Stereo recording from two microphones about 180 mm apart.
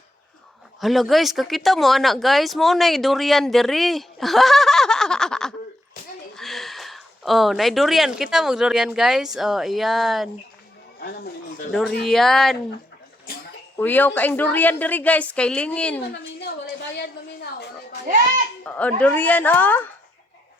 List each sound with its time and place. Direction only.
0.8 s speech: centre (ahead or behind)
11.0 s speech: 55° left (ahead or behind)
11.7 s speech: centre (ahead or behind)
13.7 s speech: 10° left (ahead or behind)
18.6 s speech: 10° left (ahead or behind)